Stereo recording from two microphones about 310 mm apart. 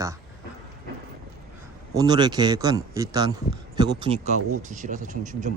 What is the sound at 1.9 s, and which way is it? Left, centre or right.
Speech, centre.